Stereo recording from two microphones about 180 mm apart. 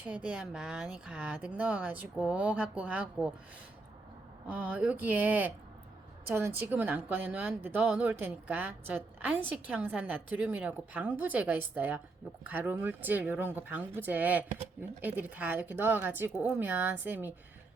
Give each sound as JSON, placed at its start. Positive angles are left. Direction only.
{"t": 0.0, "sound": "a woman's voice", "side_deg": -5}
{"t": 4.4, "sound": "a woman's voice", "side_deg": -10}